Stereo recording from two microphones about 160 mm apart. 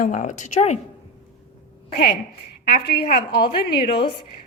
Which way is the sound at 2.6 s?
70° left (ahead or behind).